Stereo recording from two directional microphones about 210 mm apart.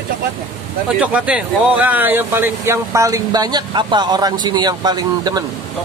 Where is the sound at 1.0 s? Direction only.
5° right (ahead or behind).